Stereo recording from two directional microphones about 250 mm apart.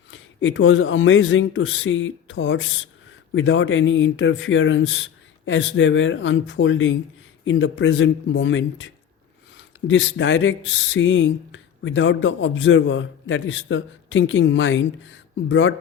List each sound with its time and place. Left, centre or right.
0.1 s speech: left